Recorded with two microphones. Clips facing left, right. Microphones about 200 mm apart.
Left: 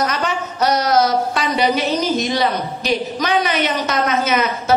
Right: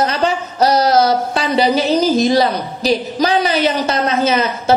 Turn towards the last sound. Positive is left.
turn(degrees=-30)  # may be behind; listen again after turning